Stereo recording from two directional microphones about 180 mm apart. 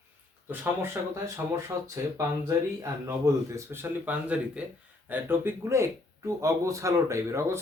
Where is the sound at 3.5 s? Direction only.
15° right (ahead or behind).